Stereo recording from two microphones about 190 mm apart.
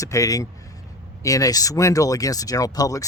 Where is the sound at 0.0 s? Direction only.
15° left (ahead or behind).